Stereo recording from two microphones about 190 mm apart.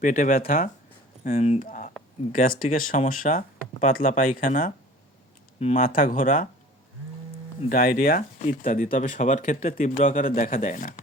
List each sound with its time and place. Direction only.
0.0 s speech: 45° left (ahead or behind)
1.2 s speech: 35° left (ahead or behind)
7.7 s speech: 45° left (ahead or behind)